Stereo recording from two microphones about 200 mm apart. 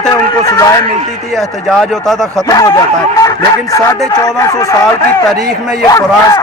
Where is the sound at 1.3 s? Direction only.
Centre (ahead or behind).